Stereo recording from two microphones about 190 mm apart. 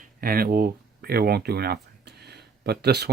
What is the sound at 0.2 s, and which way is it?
Speech, 50° right (ahead or behind).